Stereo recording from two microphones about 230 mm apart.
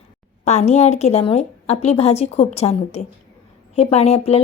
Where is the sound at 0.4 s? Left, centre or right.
Left.